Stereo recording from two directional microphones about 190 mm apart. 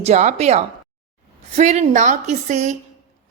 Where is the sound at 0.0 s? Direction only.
40° right (ahead or behind).